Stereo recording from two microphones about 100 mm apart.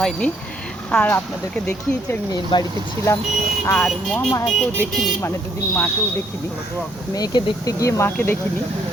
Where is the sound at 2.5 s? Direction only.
55° left (ahead or behind).